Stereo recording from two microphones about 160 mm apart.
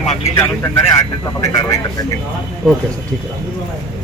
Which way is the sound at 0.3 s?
15° left (ahead or behind).